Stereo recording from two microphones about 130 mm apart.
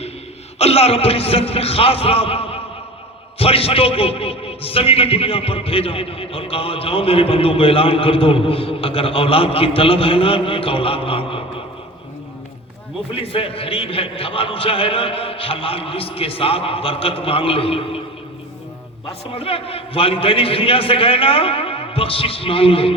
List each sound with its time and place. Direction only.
0.6 s a man's voice: 50° left (ahead or behind)
13.1 s a man's voice: 45° left (ahead or behind)
19.4 s a man's voice: 45° left (ahead or behind)